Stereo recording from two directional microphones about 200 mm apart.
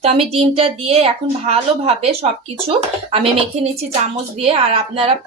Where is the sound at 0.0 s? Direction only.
30° right (ahead or behind).